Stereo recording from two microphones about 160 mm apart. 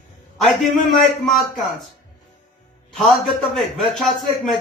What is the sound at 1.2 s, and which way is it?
Speech, centre (ahead or behind).